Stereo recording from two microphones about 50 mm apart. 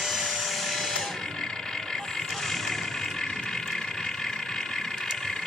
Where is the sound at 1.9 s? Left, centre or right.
Centre.